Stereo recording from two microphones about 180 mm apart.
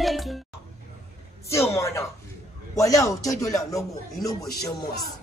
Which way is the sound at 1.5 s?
15° left (ahead or behind).